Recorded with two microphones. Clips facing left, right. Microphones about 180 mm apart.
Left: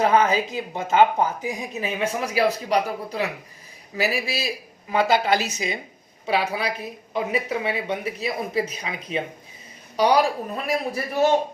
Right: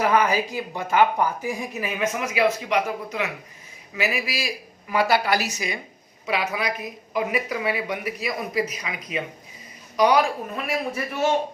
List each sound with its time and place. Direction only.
0.0 s speech: 20° left (ahead or behind); by 11.3 s 35° left (ahead or behind)